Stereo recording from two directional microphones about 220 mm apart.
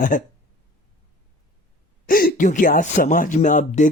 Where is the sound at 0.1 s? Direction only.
40° left (ahead or behind).